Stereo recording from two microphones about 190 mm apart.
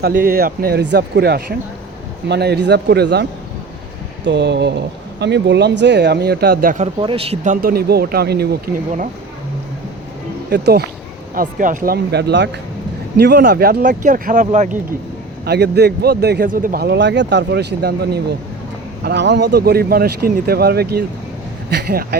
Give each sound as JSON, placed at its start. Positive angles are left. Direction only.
{"t": 0.0, "sound": "speech", "side_deg": -50}
{"t": 4.3, "sound": "speech", "side_deg": -65}
{"t": 6.8, "sound": "speech", "side_deg": -30}
{"t": 10.5, "sound": "speech", "side_deg": -55}
{"t": 15.4, "sound": "speech", "side_deg": -60}